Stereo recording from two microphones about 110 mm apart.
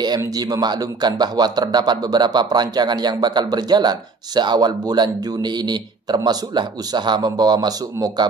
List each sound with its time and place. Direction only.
0.2 s a man's voice: 35° right (ahead or behind)